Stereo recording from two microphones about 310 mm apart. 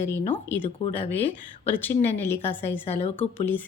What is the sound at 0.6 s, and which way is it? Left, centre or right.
Speech, centre.